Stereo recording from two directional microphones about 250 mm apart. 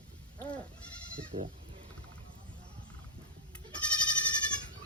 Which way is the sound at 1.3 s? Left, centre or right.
Right.